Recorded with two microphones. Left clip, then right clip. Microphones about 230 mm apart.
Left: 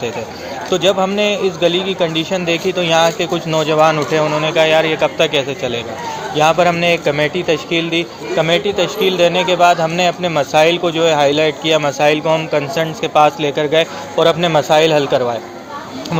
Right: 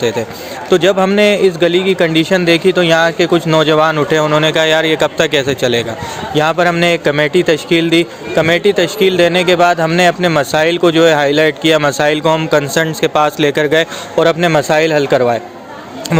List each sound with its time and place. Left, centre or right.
0.7 s a man's voice: right